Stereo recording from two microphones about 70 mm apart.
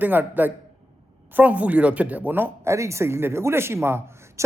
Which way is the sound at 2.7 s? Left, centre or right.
Right.